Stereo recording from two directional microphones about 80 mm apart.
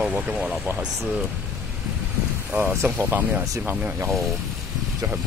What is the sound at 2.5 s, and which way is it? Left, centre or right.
Speech, centre.